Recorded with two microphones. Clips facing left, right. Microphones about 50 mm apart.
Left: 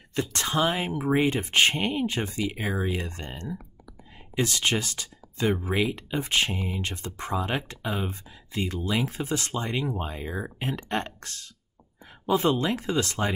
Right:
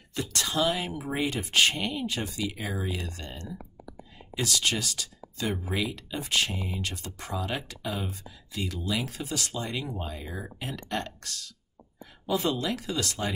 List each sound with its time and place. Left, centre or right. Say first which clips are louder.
0.1 s speech: left 3 dB; left